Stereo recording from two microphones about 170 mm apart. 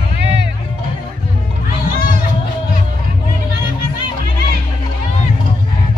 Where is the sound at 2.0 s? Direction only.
60° left (ahead or behind).